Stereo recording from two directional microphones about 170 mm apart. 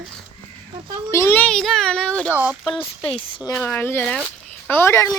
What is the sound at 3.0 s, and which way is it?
Speech, 30° left (ahead or behind).